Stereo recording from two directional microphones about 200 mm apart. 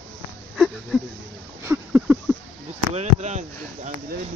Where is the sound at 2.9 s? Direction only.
35° right (ahead or behind).